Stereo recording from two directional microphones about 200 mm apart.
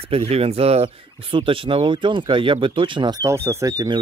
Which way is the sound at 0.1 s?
30° right (ahead or behind).